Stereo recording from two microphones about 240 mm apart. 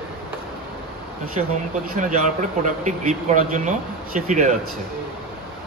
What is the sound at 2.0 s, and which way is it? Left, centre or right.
Speech, right.